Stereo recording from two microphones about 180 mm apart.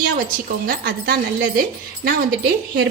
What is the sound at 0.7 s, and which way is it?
Speech, 55° right (ahead or behind).